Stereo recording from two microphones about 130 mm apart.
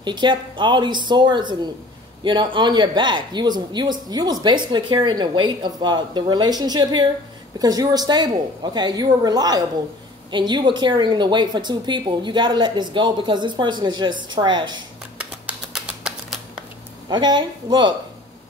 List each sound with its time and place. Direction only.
0.0 s speech: 35° right (ahead or behind)
15.1 s typewriter: 10° right (ahead or behind)
17.1 s speech: 35° right (ahead or behind)